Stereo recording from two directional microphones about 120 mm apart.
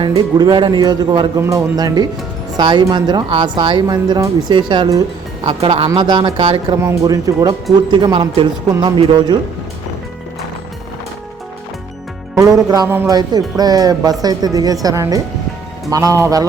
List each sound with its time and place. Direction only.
0.1 s speech: 35° right (ahead or behind)
1.4 s speech: 25° right (ahead or behind); by 5.9 s 55° right (ahead or behind)
5.9 s speech: 40° right (ahead or behind)
6.4 s speech: 50° right (ahead or behind)
6.7 s speech: 25° right (ahead or behind)
12.3 s speech: 30° right (ahead or behind)